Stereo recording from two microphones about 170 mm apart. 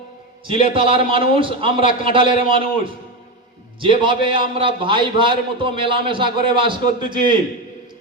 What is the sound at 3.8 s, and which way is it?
A man's voice, 30° right (ahead or behind).